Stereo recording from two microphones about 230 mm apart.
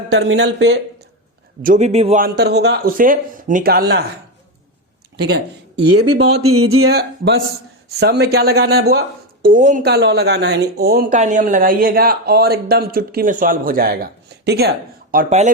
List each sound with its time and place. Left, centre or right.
0.1 s speech: right
1.6 s a man's voice: right
2.2 s speech: right
5.1 s speech: right
6.4 s speech: right
6.9 s speech: right
11.2 s a man's voice: right